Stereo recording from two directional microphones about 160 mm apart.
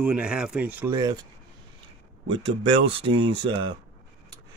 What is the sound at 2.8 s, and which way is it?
Speech, 35° right (ahead or behind).